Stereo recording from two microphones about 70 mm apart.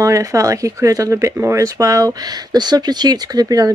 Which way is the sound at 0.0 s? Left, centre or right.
Right.